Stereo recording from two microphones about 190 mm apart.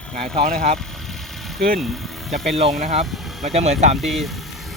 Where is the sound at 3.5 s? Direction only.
35° right (ahead or behind).